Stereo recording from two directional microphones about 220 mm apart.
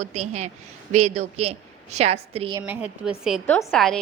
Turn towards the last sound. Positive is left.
turn(degrees=0)  # may be behind; listen again after turning